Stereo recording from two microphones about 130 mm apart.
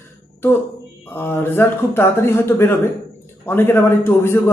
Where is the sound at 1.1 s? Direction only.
15° left (ahead or behind).